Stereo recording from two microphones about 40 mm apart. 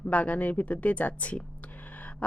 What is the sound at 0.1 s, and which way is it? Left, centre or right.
Speech, left.